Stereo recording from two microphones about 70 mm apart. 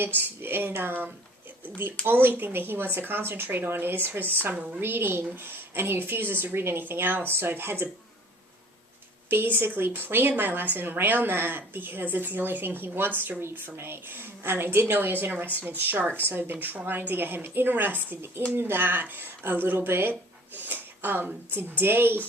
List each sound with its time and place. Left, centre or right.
0.0 s speech: right
4.5 s a woman's voice: centre
4.8 s speech: right
9.3 s speech: right